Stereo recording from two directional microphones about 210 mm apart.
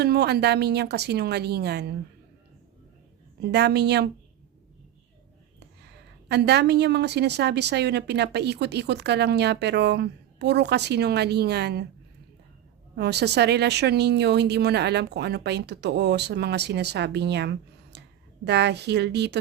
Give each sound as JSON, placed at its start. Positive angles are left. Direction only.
{"t": 0.0, "sound": "a woman's voice", "side_deg": -50}
{"t": 3.4, "sound": "a woman's voice", "side_deg": -50}
{"t": 5.5, "sound": "a woman's voice", "side_deg": -50}
{"t": 13.0, "sound": "a woman's voice", "side_deg": -55}